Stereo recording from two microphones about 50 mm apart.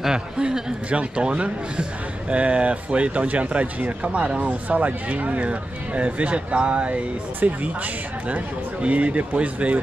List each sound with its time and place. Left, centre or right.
0.0 s a man's voice: centre
8.8 s a man's voice: right